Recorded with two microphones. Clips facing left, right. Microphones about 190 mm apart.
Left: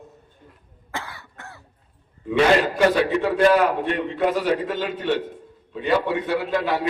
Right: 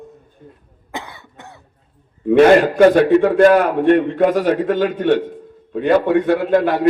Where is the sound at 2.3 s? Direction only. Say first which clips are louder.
Right 8 dB; 50° right (ahead or behind).